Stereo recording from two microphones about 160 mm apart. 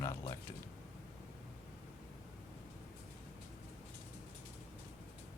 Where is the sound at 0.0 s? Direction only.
20° left (ahead or behind).